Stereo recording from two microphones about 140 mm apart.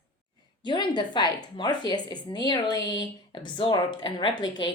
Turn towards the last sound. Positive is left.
turn(degrees=35)  # may be behind; listen again after turning